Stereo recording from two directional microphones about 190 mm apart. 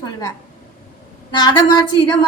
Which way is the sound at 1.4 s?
20° left (ahead or behind).